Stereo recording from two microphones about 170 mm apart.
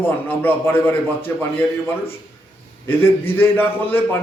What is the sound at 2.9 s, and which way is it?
A man's voice, 15° left (ahead or behind).